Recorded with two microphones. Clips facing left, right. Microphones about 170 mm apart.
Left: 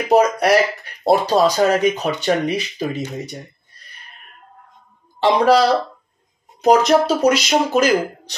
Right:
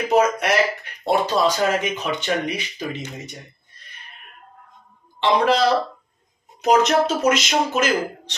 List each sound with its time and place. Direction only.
0.1 s a sound: 35° left (ahead or behind)
1.0 s speech: 40° left (ahead or behind)
5.2 s speech: 35° left (ahead or behind)